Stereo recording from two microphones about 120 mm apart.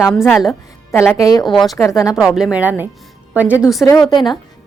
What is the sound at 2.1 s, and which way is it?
A woman's voice, 5° right (ahead or behind).